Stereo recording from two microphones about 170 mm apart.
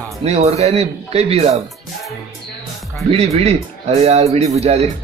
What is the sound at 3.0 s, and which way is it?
Speech, 35° right (ahead or behind).